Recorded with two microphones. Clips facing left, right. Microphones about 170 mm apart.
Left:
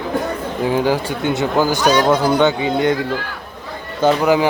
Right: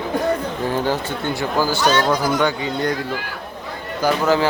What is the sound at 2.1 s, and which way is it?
Speech, 25° left (ahead or behind).